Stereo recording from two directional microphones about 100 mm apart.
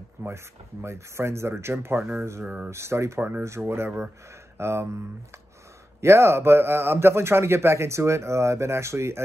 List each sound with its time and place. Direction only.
0.2 s a sound: 25° right (ahead or behind)
0.8 s a man's voice: 25° right (ahead or behind)
5.9 s a man's voice: 25° right (ahead or behind)